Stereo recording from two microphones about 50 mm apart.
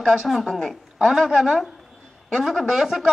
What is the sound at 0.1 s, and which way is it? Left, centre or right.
Speech, centre.